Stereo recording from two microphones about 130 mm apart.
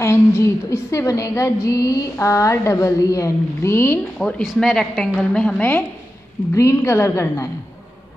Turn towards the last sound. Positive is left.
turn(degrees=20)  # may be behind; listen again after turning